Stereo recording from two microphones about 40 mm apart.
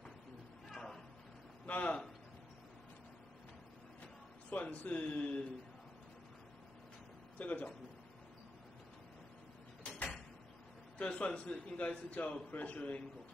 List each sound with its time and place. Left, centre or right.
0.7 s a sound: centre
1.7 s a man's voice: left
4.5 s a man's voice: left
7.3 s a man's voice: left
11.0 s a man's voice: left